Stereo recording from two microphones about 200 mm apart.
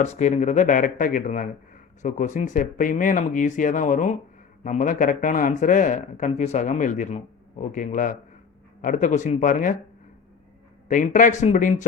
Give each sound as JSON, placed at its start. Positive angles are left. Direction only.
{"t": 0.0, "sound": "speech", "side_deg": 35}
{"t": 10.8, "sound": "speech", "side_deg": 40}